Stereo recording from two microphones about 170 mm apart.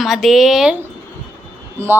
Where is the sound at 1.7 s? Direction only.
15° right (ahead or behind).